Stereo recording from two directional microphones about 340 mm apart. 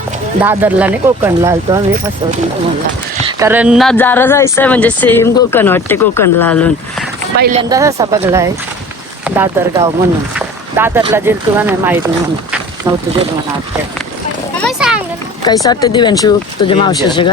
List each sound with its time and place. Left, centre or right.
0.4 s speech: centre
3.3 s speech: centre
7.3 s speech: right
7.7 s speech: centre
14.6 s children playing: centre
15.4 s speech: centre